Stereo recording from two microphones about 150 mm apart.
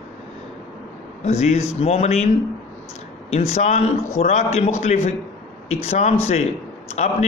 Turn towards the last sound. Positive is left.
turn(degrees=50)  # may be behind; listen again after turning